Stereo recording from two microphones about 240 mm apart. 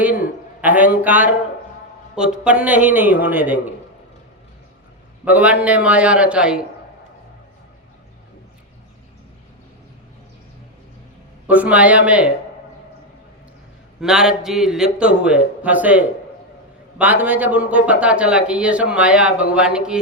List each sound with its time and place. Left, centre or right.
0.6 s a man's voice: centre
5.2 s a man's voice: centre
11.4 s a man's voice: centre
14.0 s a man's voice: centre